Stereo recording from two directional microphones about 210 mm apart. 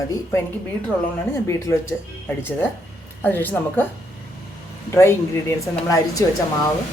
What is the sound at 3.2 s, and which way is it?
Speech, 10° left (ahead or behind).